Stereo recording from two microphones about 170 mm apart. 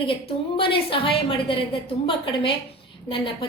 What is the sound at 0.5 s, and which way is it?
Speech, 30° left (ahead or behind).